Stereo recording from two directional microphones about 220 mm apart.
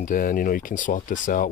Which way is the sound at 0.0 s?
40° left (ahead or behind).